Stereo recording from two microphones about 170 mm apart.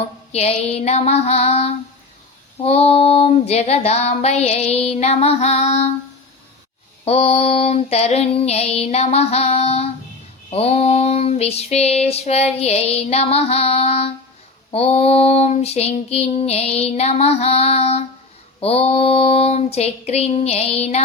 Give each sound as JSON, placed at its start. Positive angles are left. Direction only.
{"t": 0.3, "sound": "child singing", "side_deg": 40}
{"t": 7.0, "sound": "child singing", "side_deg": 35}